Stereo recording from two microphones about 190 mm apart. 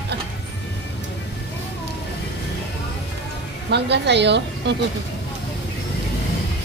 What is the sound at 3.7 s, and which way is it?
Speech, 65° right (ahead or behind).